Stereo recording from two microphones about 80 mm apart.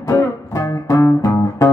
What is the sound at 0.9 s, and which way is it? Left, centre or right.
Music, left.